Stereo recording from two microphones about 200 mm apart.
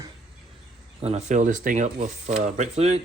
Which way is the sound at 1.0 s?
35° right (ahead or behind).